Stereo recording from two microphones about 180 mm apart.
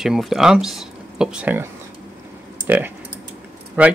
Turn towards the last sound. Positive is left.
turn(degrees=-10)  # may be behind; listen again after turning